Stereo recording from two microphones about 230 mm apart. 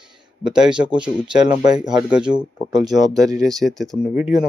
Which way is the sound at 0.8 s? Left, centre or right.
Centre.